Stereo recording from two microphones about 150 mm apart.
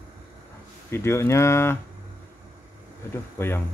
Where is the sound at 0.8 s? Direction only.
15° left (ahead or behind).